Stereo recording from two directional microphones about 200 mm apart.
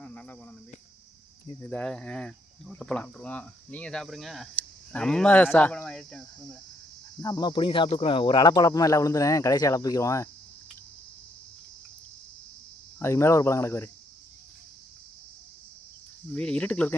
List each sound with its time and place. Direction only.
0.0 s cricket: 5° left (ahead or behind)
1.6 s speech: 5° left (ahead or behind)
7.2 s speech: 20° left (ahead or behind)
13.0 s speech: 15° left (ahead or behind)
16.3 s speech: 5° left (ahead or behind)